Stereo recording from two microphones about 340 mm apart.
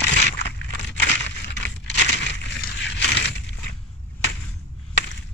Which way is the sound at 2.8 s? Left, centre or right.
Left.